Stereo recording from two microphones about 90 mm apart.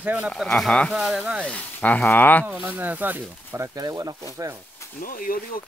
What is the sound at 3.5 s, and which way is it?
Speech, 40° right (ahead or behind).